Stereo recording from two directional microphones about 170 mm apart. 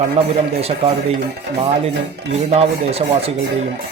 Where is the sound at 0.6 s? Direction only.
35° right (ahead or behind).